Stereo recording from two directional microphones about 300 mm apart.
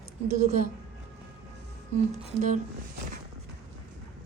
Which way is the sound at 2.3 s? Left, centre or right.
Right.